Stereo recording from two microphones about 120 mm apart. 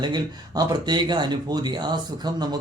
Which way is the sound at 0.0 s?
35° right (ahead or behind).